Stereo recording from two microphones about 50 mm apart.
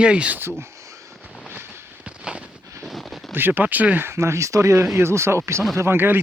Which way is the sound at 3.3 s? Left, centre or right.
Right.